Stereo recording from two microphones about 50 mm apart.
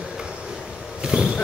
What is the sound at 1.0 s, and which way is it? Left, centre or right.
Vehicle, centre.